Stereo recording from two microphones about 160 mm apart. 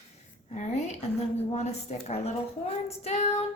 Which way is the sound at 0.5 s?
45° left (ahead or behind).